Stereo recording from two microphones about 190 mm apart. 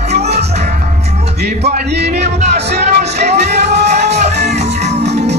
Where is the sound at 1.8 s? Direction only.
60° right (ahead or behind).